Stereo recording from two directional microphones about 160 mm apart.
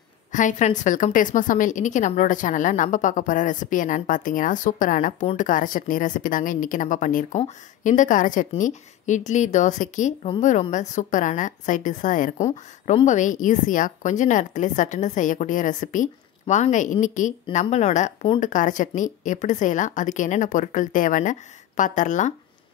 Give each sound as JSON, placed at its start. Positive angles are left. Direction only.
{"t": 0.3, "sound": "a woman's voice", "side_deg": 50}